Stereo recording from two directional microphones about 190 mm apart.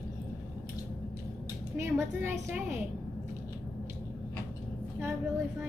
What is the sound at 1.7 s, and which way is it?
A woman's voice, 10° right (ahead or behind).